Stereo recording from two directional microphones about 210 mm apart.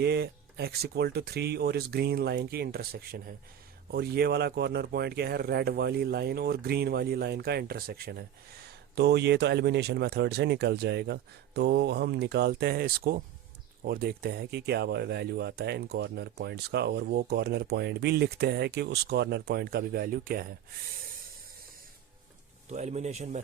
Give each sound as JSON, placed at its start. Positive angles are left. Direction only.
{"t": 0.0, "sound": "speech", "side_deg": -50}
{"t": 22.7, "sound": "speech", "side_deg": -30}